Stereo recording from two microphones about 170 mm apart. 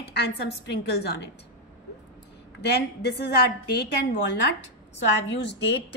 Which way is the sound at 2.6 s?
75° left (ahead or behind).